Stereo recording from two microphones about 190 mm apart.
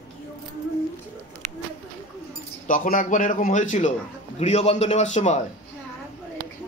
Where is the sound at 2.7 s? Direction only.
45° left (ahead or behind).